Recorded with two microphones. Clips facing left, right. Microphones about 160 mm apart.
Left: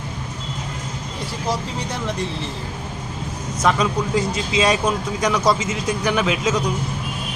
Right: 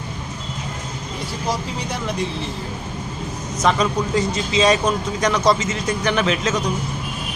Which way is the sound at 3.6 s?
5° left (ahead or behind).